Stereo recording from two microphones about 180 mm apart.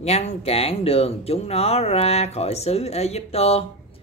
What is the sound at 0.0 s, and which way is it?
Speech, 35° left (ahead or behind).